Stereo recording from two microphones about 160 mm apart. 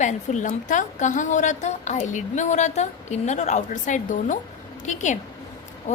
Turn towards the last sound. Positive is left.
turn(degrees=50)  # may be behind; listen again after turning